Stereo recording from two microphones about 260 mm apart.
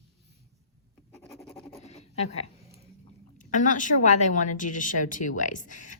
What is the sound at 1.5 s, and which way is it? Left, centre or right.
Pant, left.